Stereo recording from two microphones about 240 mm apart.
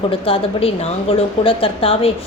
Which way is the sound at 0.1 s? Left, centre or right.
Left.